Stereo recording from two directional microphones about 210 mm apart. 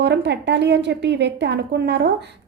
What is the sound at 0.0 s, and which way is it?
A woman's voice, 55° right (ahead or behind).